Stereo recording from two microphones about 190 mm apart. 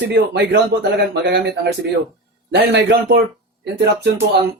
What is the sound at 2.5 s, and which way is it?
Speech, 65° right (ahead or behind).